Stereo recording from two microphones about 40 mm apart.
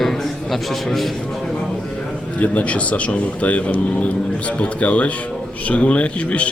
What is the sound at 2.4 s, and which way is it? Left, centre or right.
A man's voice, left.